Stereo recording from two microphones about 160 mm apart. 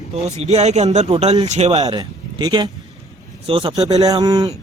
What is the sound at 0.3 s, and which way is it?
Speech, 45° right (ahead or behind).